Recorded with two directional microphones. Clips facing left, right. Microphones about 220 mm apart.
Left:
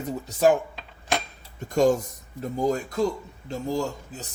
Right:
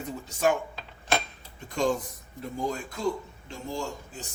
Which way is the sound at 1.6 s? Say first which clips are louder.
Left 6 dB; 45° left (ahead or behind).